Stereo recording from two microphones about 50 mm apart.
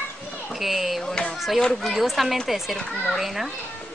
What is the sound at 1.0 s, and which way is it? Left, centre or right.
Speech, centre.